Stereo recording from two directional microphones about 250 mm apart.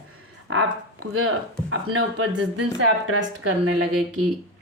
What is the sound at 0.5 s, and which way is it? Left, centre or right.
Speech, right.